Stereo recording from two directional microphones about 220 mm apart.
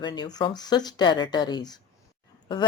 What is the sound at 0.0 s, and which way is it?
Speech, 20° left (ahead or behind).